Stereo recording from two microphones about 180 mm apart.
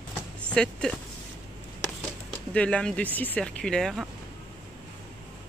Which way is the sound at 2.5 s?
5° left (ahead or behind).